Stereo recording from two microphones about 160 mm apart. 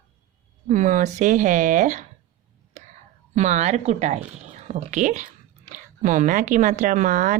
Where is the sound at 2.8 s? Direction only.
45° right (ahead or behind).